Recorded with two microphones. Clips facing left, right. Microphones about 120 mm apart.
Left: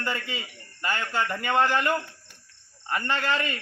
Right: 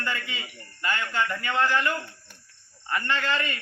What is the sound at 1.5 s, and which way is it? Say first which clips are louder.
Speech: left 3 dB; 50° left (ahead or behind).